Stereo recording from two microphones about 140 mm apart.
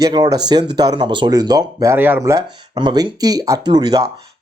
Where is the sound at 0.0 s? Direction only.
30° right (ahead or behind).